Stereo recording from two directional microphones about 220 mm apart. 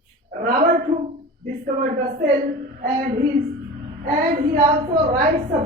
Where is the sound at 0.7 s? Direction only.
30° right (ahead or behind).